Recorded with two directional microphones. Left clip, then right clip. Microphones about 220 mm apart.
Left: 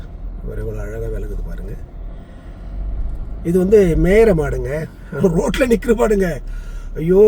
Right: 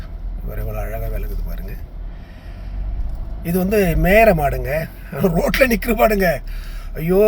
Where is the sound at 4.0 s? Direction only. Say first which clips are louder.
Even; centre (ahead or behind).